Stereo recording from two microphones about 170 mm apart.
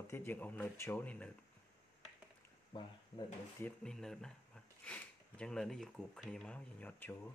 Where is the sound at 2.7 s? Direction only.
30° left (ahead or behind).